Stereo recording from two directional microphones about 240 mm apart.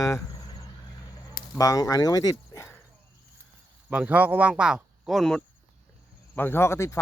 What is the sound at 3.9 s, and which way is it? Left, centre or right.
Speech, centre.